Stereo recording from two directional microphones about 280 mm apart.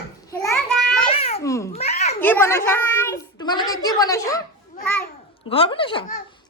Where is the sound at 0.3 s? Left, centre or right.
Centre.